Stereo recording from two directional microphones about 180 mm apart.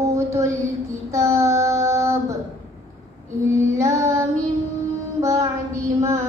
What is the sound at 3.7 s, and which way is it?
Child singing, 15° right (ahead or behind).